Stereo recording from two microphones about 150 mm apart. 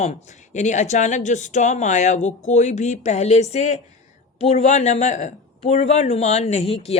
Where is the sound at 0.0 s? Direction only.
50° left (ahead or behind).